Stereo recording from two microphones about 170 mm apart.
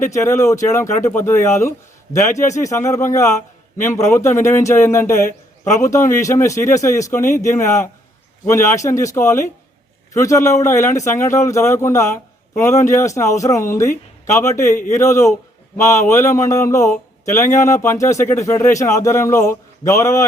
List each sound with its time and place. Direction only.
0.1 s speech: 15° left (ahead or behind)